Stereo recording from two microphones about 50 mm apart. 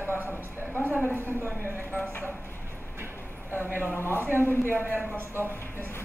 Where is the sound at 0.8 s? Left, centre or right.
Right.